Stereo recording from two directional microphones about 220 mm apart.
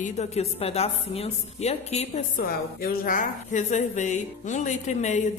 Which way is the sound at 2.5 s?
40° left (ahead or behind).